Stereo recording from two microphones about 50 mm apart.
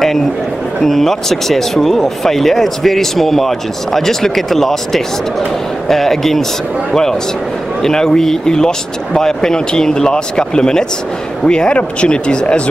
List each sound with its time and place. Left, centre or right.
0.8 s speech: centre